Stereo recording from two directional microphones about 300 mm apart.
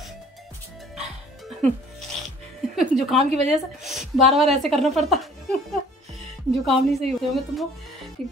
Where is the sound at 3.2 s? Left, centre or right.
Right.